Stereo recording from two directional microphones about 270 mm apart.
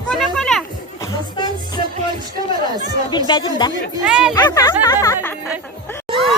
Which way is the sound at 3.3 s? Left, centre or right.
Centre.